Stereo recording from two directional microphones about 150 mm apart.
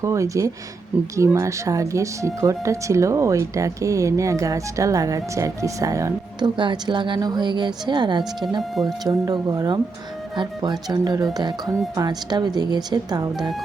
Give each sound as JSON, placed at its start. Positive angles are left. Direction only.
{"t": 0.0, "sound": "speech", "side_deg": -20}